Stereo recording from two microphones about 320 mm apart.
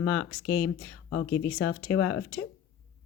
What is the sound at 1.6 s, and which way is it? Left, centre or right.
Speech, centre.